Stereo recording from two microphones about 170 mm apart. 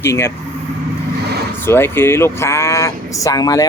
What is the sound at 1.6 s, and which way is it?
Speech, 15° left (ahead or behind).